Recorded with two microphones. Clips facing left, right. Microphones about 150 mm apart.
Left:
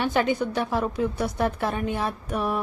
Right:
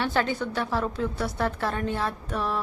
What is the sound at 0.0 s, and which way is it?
A woman's voice, 15° left (ahead or behind).